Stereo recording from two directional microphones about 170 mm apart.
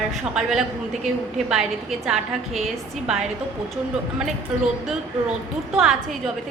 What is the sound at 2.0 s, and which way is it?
Speech, 5° right (ahead or behind).